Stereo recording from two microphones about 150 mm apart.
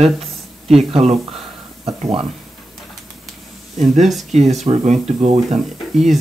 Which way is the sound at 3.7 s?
50° right (ahead or behind).